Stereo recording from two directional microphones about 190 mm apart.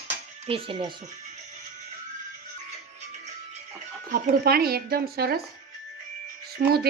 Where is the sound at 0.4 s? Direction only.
30° right (ahead or behind).